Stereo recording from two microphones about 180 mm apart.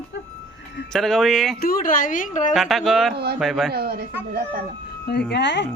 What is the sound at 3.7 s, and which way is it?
Speech, 60° right (ahead or behind).